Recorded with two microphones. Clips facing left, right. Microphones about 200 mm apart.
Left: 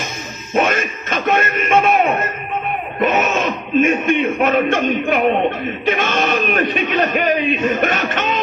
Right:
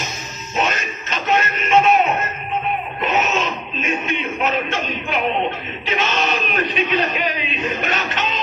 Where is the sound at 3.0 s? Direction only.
50° left (ahead or behind).